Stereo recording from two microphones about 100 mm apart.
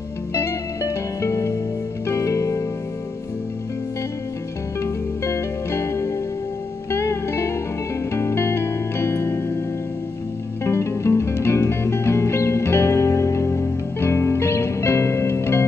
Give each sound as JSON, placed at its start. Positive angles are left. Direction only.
{"t": 0.3, "sound": "music", "side_deg": 25}
{"t": 4.7, "sound": "music", "side_deg": 30}
{"t": 10.6, "sound": "music", "side_deg": 25}